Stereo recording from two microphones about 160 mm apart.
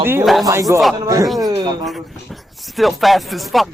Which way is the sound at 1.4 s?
25° right (ahead or behind).